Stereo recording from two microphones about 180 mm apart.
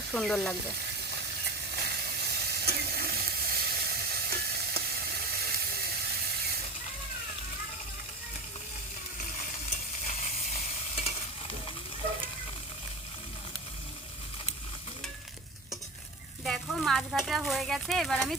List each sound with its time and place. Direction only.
0.1 s speech: centre (ahead or behind)
1.7 s sizzle: 60° right (ahead or behind)
16.4 s speech: centre (ahead or behind)